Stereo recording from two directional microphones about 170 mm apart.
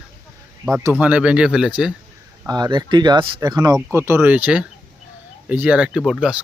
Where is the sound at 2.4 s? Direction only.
25° right (ahead or behind).